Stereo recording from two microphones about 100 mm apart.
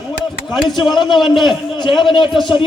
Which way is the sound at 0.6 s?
50° left (ahead or behind).